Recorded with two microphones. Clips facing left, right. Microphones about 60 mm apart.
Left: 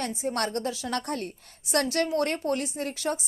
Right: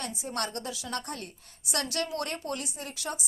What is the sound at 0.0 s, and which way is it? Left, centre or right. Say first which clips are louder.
A woman's voice: left 5 dB; left.